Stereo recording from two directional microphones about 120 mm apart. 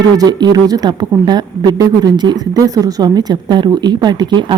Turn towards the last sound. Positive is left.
turn(degrees=-40)  # may be behind; listen again after turning